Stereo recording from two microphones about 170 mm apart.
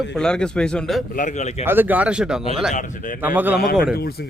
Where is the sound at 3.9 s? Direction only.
65° left (ahead or behind).